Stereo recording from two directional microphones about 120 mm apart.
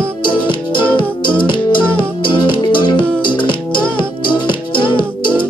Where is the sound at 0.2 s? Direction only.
40° left (ahead or behind).